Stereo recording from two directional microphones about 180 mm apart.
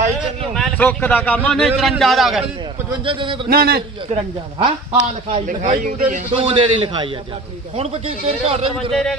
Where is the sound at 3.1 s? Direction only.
25° right (ahead or behind).